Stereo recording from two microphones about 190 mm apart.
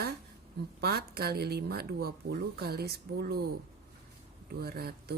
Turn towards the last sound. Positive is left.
turn(degrees=-55)  # may be behind; listen again after turning